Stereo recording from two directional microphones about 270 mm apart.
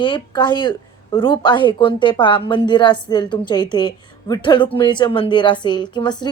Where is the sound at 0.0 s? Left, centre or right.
Centre.